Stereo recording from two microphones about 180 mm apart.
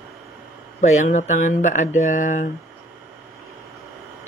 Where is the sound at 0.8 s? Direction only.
40° left (ahead or behind).